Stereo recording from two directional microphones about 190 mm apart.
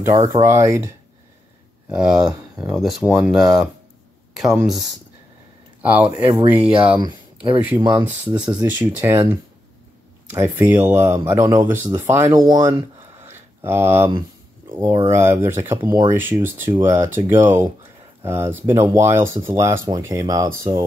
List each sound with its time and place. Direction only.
0.3 s speech: 15° right (ahead or behind)
1.9 s speech: 5° right (ahead or behind)
5.8 s a sound: 10° right (ahead or behind)
6.0 s speech: 30° right (ahead or behind)
6.4 s speech: 10° right (ahead or behind)
7.0 s speech: 20° right (ahead or behind)
10.3 s speech: 15° right (ahead or behind)
13.3 s a sound: 10° right (ahead or behind)
15.0 s speech: 15° right (ahead or behind)